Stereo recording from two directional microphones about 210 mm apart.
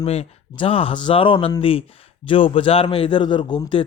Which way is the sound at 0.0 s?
30° left (ahead or behind).